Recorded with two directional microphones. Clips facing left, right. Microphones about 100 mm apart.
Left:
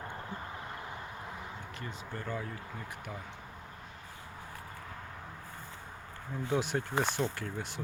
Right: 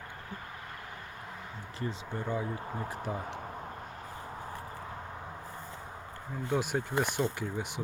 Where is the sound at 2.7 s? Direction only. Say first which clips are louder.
Right 7 dB; 35° right (ahead or behind).